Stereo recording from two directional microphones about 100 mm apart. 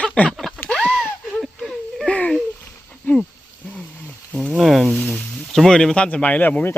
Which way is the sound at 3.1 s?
15° left (ahead or behind).